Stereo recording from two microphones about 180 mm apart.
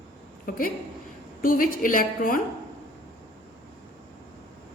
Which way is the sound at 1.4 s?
50° left (ahead or behind).